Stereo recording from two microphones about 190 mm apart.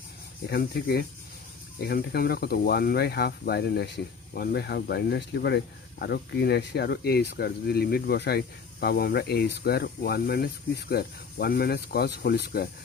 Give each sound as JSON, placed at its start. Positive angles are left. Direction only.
{"t": 0.5, "sound": "speech", "side_deg": 55}